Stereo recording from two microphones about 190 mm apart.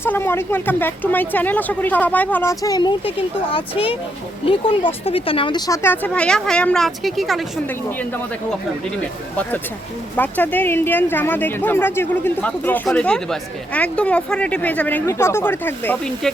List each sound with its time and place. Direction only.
0.0 s speech: 10° left (ahead or behind)
9.3 s speech: 10° left (ahead or behind)